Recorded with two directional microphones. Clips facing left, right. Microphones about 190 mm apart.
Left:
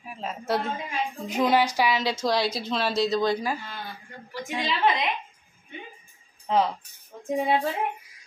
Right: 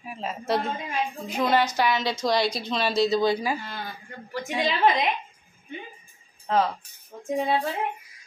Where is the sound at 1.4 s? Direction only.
10° left (ahead or behind); by 3.5 s 5° right (ahead or behind).